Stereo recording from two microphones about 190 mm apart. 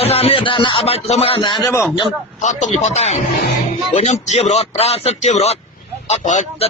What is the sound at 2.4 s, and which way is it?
A man's voice, 40° left (ahead or behind).